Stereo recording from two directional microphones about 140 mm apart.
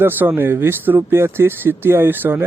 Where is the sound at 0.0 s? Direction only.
15° right (ahead or behind).